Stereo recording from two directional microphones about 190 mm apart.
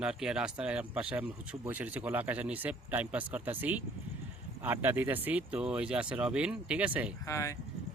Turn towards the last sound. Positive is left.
turn(degrees=15)  # may be behind; listen again after turning